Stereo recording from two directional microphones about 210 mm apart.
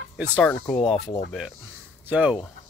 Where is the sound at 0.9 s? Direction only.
30° left (ahead or behind).